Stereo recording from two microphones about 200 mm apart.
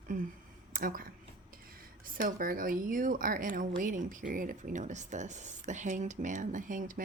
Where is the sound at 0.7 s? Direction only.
45° right (ahead or behind).